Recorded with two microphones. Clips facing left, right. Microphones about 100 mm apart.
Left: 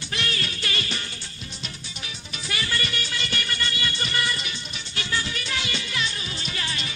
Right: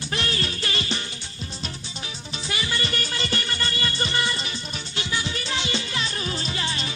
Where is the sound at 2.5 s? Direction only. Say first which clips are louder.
Even; 20° right (ahead or behind).